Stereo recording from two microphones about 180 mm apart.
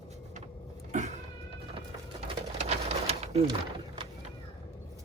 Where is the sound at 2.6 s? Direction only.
35° right (ahead or behind).